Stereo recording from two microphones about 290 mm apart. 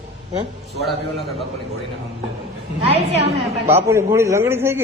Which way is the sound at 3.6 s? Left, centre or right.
Centre.